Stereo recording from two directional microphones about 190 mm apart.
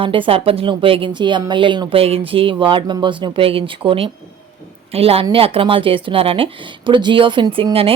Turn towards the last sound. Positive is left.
turn(degrees=-30)  # may be behind; listen again after turning